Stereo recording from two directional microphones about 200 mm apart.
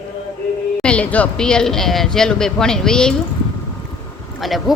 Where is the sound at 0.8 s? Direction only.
5° left (ahead or behind).